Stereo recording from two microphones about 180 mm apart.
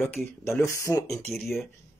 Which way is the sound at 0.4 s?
15° left (ahead or behind).